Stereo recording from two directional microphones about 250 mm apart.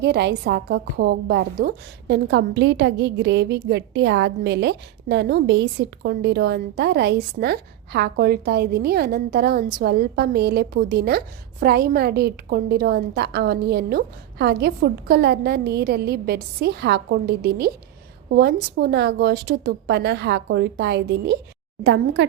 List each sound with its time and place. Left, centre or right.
0.0 s a woman's voice: right